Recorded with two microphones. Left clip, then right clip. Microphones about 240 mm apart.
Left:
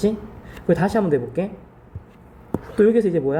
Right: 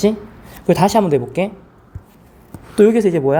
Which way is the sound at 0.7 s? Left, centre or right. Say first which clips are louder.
Right 6 dB; right.